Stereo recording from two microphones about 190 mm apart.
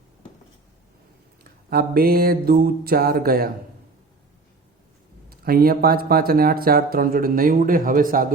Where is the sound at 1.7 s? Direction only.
55° right (ahead or behind).